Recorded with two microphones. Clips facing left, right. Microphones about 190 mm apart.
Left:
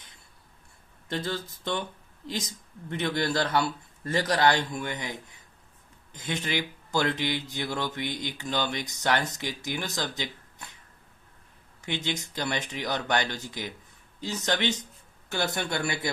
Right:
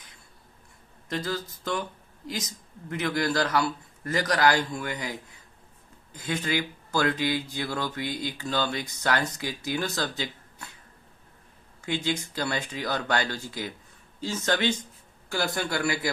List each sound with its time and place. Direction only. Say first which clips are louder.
1.1 s speech: right 1 dB; 25° left (ahead or behind)
6.1 s speech: right 2 dB; 25° left (ahead or behind)
11.8 s speech: right 3 dB; 20° left (ahead or behind)